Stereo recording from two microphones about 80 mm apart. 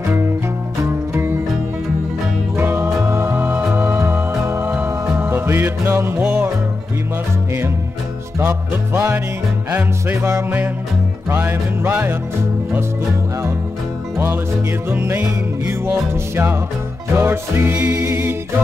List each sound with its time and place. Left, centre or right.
2.5 s music: right
8.4 s music: right
14.1 s music: right